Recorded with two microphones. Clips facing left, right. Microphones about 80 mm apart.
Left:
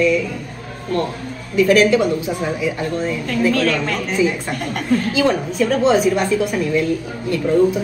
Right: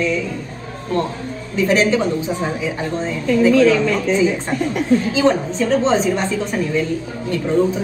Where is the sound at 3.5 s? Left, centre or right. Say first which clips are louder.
Right 5 dB; left.